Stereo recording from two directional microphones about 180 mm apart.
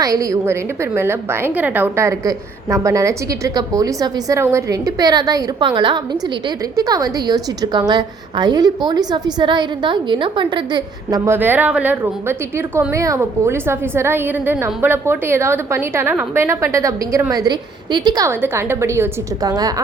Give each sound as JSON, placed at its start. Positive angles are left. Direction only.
{"t": 0.0, "sound": "a woman's voice", "side_deg": -15}
{"t": 11.3, "sound": "a woman's voice", "side_deg": -10}